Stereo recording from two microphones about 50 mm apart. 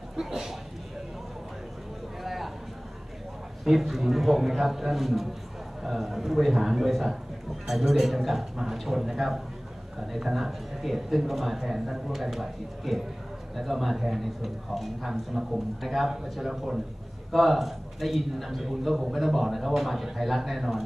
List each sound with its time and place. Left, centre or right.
0.2 s speech: centre
2.2 s a sound: centre
3.6 s a man's voice: centre